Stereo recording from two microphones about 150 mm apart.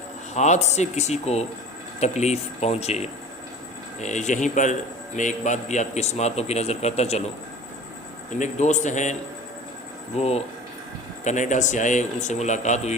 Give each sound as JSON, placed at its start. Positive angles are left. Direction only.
{"t": 0.3, "sound": "a man's voice", "side_deg": 50}
{"t": 8.4, "sound": "a man's voice", "side_deg": 50}
{"t": 10.2, "sound": "a man's voice", "side_deg": 45}